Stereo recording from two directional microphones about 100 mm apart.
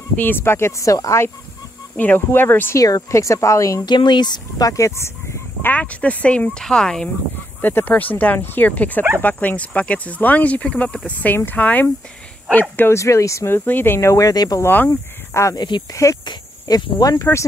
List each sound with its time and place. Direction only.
0.2 s speech: 20° left (ahead or behind)
2.0 s speech: 20° left (ahead or behind)
2.8 s speech: 35° left (ahead or behind)
3.8 s speech: 45° left (ahead or behind); by 7.1 s 5° left (ahead or behind)
7.6 s speech: 20° left (ahead or behind)
12.9 s speech: 30° left (ahead or behind)
13.7 s speech: 20° left (ahead or behind); by 14.6 s 40° left (ahead or behind)
14.6 s speech: 20° left (ahead or behind)
14.9 s speech: 30° left (ahead or behind)
15.6 s speech: 45° left (ahead or behind)
17.2 s speech: 25° left (ahead or behind)